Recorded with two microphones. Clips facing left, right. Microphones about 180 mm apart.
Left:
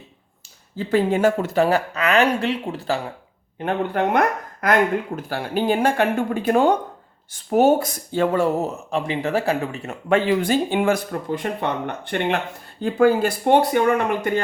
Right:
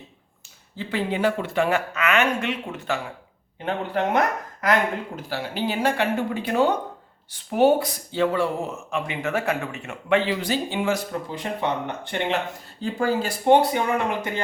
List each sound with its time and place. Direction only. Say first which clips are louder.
0.8 s speech: left 6 dB; 45° left (ahead or behind)
3.6 s speech: left 3 dB; 55° left (ahead or behind)